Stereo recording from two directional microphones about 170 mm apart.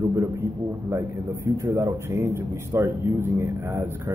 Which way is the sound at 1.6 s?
15° right (ahead or behind).